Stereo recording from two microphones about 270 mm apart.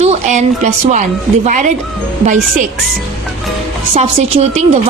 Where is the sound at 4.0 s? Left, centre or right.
Right.